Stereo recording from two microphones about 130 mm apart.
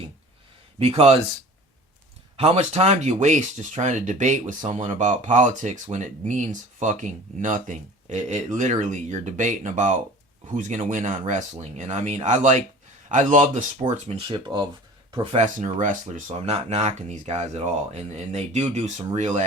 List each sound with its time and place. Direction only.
0.8 s speech: 50° right (ahead or behind)
2.3 s speech: 50° right (ahead or behind); by 11.4 s 70° right (ahead or behind)
11.8 s speech: 60° right (ahead or behind)
14.1 s speech: 40° right (ahead or behind)
15.8 s speech: 75° right (ahead or behind)